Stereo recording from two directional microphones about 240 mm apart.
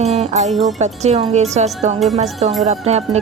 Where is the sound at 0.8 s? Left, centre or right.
Right.